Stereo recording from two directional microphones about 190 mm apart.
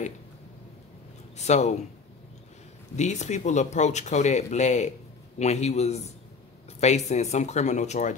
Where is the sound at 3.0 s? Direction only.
40° left (ahead or behind).